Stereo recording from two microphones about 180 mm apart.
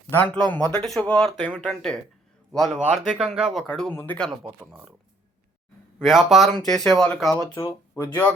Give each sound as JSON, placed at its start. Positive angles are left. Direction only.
{"t": 0.1, "sound": "speech", "side_deg": 10}
{"t": 4.4, "sound": "speech", "side_deg": -10}
{"t": 6.0, "sound": "speech", "side_deg": 0}
{"t": 7.5, "sound": "speech", "side_deg": 15}